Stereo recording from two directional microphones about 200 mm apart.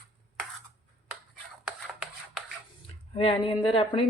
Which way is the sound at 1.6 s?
Centre (ahead or behind).